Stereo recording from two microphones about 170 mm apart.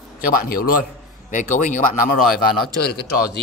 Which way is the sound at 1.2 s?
50° left (ahead or behind).